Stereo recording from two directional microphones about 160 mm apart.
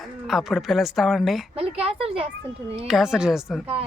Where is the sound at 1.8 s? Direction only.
35° right (ahead or behind).